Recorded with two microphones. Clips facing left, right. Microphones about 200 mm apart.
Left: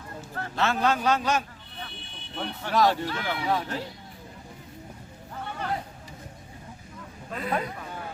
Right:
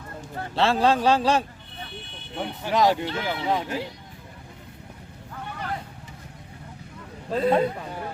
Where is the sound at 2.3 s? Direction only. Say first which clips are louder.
Right 2 dB; 15° right (ahead or behind).